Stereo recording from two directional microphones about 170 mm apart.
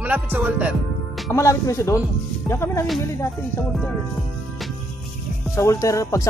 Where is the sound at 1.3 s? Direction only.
15° left (ahead or behind).